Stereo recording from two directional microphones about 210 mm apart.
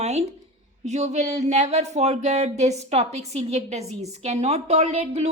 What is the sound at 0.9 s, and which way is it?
Speech, 30° right (ahead or behind).